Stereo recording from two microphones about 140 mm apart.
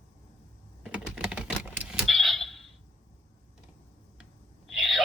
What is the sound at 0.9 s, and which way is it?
Typing, 5° right (ahead or behind).